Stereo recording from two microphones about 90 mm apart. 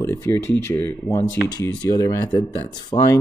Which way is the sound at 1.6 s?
40° left (ahead or behind).